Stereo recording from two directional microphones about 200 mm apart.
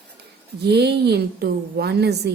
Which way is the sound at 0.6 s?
55° right (ahead or behind).